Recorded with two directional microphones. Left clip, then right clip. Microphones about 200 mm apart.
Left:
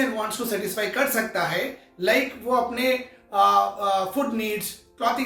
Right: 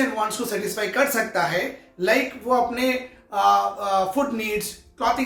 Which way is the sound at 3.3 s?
20° right (ahead or behind).